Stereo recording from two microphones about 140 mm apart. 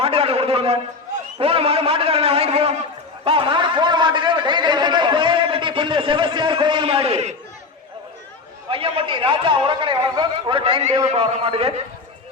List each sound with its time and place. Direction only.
0.0 s a sound: 45° right (ahead or behind)
1.4 s a man's voice: 45° right (ahead or behind)
8.7 s a man's voice: 40° right (ahead or behind)